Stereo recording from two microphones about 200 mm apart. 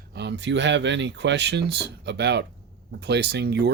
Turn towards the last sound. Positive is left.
turn(degrees=-55)  # may be behind; listen again after turning